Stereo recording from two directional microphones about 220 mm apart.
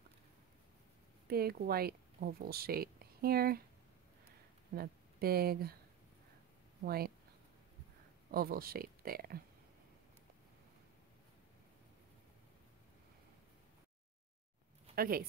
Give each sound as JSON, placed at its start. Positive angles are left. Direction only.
{"t": 1.2, "sound": "speech", "side_deg": -45}
{"t": 4.7, "sound": "speech", "side_deg": -45}
{"t": 6.8, "sound": "speech", "side_deg": -45}
{"t": 8.3, "sound": "speech", "side_deg": -40}
{"t": 15.0, "sound": "speech", "side_deg": -40}